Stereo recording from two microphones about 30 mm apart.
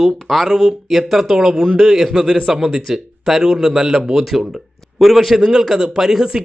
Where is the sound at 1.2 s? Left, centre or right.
Centre.